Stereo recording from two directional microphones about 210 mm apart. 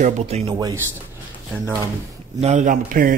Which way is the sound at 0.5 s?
15° right (ahead or behind).